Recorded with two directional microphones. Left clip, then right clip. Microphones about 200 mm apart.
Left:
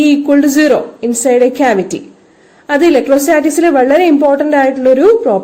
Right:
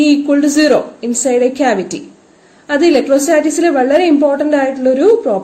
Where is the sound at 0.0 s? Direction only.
40° left (ahead or behind).